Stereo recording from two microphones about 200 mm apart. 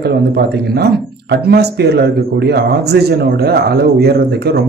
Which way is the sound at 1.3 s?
55° right (ahead or behind).